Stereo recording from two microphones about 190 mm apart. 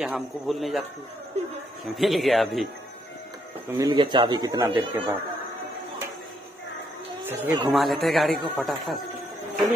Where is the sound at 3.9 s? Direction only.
25° right (ahead or behind).